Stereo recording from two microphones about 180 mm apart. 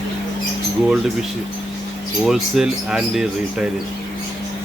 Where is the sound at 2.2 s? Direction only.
Centre (ahead or behind).